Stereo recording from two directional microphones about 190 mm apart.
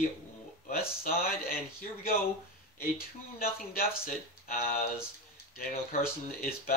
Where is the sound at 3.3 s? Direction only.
50° left (ahead or behind).